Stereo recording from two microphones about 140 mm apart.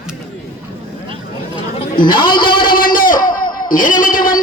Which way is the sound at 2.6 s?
90° left.